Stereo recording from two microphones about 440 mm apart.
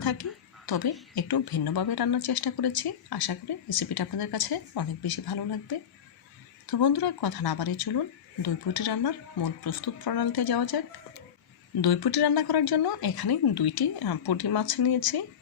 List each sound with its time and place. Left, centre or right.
0.0 s a sound: left
1.1 s speech: left
11.8 s speech: left